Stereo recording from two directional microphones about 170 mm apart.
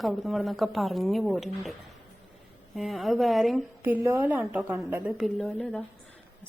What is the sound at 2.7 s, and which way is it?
Speech, centre (ahead or behind).